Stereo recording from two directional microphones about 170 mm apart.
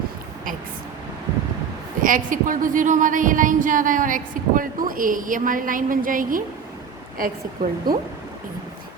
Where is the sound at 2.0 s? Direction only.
50° right (ahead or behind).